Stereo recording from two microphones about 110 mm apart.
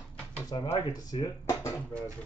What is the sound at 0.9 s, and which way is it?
Speech, 35° left (ahead or behind).